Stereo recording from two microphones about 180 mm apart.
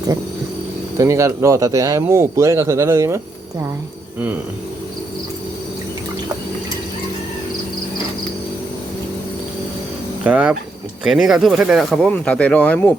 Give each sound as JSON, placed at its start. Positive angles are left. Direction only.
{"t": 0.9, "sound": "speech", "side_deg": -15}
{"t": 10.2, "sound": "speech", "side_deg": -10}